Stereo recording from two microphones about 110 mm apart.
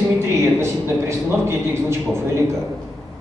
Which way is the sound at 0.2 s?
25° right (ahead or behind).